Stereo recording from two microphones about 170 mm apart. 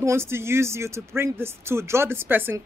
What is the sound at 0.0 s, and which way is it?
Speech, 15° right (ahead or behind).